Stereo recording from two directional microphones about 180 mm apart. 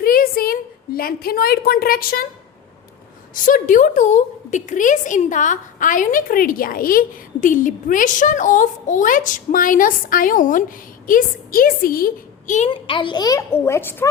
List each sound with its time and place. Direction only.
0.0 s a sound: 55° left (ahead or behind)
3.3 s a woman's voice: 45° left (ahead or behind)
12.7 s speech: 30° left (ahead or behind)